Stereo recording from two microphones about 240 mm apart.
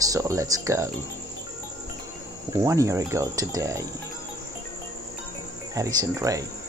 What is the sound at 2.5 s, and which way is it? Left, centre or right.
Speech, centre.